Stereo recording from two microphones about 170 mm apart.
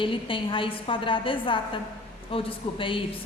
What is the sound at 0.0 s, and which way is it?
A woman's voice, 30° left (ahead or behind).